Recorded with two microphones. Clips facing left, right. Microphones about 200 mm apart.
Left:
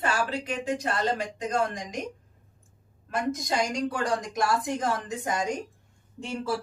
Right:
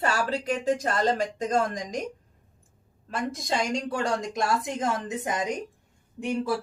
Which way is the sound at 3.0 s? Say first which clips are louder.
Left 1 dB; 30° right (ahead or behind).